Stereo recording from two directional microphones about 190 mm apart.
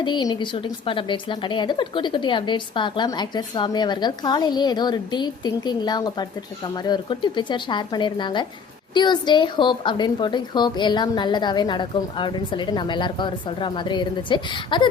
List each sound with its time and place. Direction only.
0.0 s a woman's voice: 20° left (ahead or behind)